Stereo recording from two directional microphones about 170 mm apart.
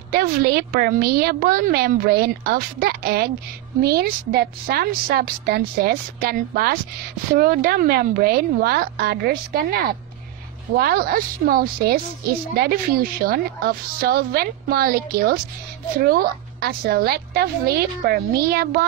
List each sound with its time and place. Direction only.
0.1 s a woman's voice: 60° right (ahead or behind)